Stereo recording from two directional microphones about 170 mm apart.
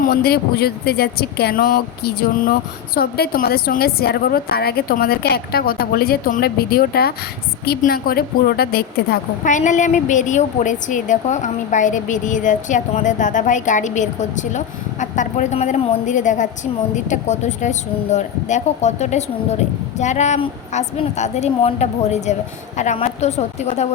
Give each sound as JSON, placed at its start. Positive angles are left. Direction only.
{"t": 0.0, "sound": "a woman's voice", "side_deg": 65}
{"t": 9.5, "sound": "a woman's voice", "side_deg": 45}